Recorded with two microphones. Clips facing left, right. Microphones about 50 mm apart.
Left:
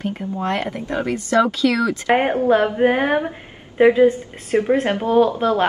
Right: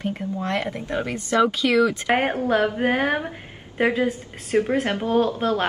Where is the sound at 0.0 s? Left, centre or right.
Left.